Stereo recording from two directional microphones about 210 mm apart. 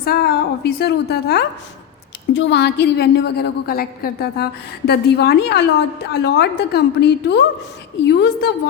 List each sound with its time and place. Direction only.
0.0 s a woman's voice: 45° left (ahead or behind)